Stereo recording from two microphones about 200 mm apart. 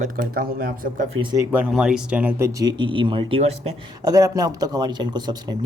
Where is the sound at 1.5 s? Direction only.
5° right (ahead or behind); by 5.5 s 20° right (ahead or behind).